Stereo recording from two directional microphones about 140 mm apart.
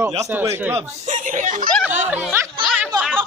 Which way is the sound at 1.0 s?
65° right (ahead or behind).